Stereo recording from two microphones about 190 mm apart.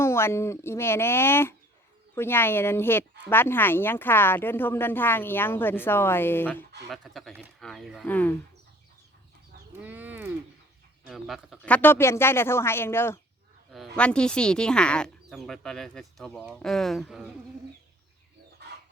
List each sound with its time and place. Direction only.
0.0 s a woman's voice: 15° left (ahead or behind)
6.8 s speech: centre (ahead or behind)
9.8 s a sound: 10° right (ahead or behind)
11.1 s a woman's voice: centre (ahead or behind)
18.6 s chicken: 60° right (ahead or behind)